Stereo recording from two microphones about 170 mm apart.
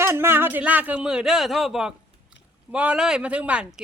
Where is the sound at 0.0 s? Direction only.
15° right (ahead or behind).